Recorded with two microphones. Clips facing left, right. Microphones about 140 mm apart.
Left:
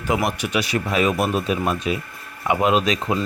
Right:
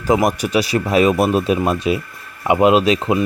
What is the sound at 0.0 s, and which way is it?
Speech, 40° right (ahead or behind).